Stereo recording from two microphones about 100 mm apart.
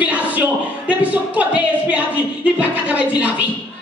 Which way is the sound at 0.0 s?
15° right (ahead or behind).